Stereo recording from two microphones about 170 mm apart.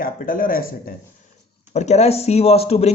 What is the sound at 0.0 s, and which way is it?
Speech, 55° left (ahead or behind).